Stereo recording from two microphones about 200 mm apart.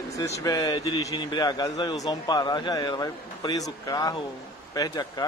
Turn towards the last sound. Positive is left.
turn(degrees=20)  # may be behind; listen again after turning